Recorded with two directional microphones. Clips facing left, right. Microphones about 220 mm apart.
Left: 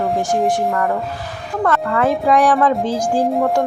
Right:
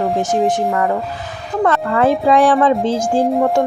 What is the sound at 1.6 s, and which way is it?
A woman's voice, 25° right (ahead or behind).